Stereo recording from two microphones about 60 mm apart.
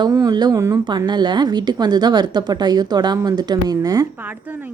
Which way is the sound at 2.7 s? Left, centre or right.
Right.